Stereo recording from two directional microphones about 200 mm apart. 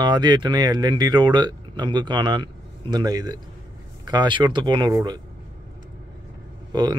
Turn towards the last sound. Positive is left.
turn(degrees=-20)  # may be behind; listen again after turning